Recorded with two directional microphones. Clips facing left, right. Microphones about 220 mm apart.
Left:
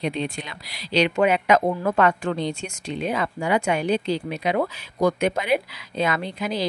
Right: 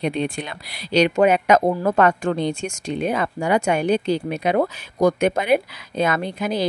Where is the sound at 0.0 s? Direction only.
55° right (ahead or behind).